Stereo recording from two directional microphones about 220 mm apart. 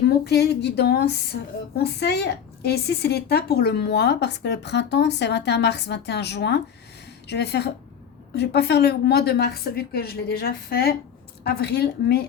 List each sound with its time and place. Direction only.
0.1 s speech: 45° left (ahead or behind)